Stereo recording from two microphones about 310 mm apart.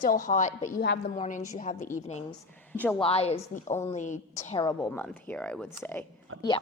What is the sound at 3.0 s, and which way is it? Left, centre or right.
A woman's voice, centre.